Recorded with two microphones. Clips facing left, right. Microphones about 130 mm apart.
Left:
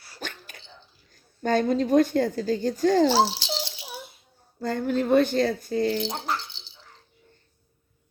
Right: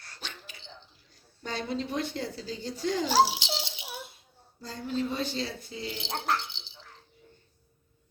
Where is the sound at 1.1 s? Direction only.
50° left (ahead or behind).